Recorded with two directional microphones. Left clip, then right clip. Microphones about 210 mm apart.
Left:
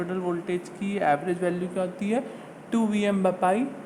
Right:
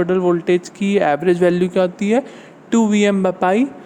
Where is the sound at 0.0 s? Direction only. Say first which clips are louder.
Right 13 dB; 45° right (ahead or behind).